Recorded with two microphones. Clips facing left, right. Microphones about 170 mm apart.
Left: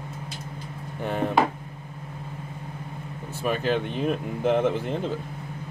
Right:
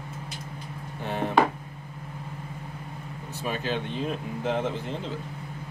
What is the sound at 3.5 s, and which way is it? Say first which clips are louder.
Speech: left 5 dB; 55° left (ahead or behind).